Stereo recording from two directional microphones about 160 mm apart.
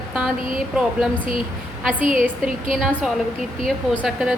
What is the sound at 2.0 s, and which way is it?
Speech, 55° right (ahead or behind).